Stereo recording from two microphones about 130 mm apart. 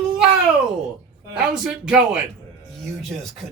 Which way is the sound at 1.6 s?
5° right (ahead or behind).